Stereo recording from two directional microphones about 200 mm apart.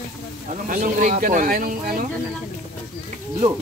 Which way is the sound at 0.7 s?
40° right (ahead or behind).